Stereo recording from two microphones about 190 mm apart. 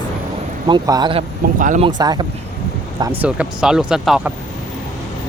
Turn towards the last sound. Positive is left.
turn(degrees=-5)  # may be behind; listen again after turning